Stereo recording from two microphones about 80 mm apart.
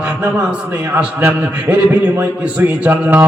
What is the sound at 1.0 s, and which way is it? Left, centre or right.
A man's voice, centre.